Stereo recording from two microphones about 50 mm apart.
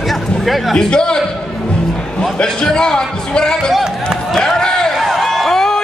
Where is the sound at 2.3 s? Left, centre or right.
Centre.